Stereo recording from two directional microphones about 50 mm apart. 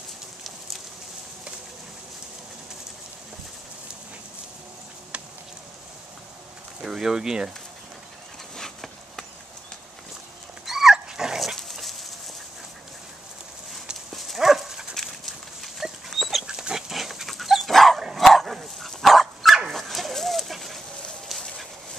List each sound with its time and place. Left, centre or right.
6.8 s speech: centre
8.5 s a sound: centre
10.6 s dog: centre
11.3 s dog: centre
14.1 s dog: centre
15.0 s dog: centre
16.4 s dog: centre
19.7 s goat: centre
21.3 s a sound: centre